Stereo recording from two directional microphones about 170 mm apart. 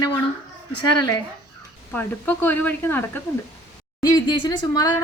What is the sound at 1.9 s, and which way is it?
A woman's voice, 10° left (ahead or behind).